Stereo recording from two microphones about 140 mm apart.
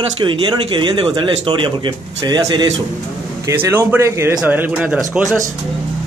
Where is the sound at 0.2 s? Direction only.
35° right (ahead or behind).